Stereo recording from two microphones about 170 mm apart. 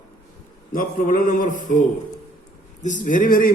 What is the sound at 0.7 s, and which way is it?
A man's voice, 55° left (ahead or behind).